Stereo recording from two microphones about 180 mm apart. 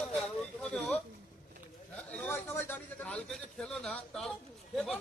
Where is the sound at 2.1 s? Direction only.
10° left (ahead or behind).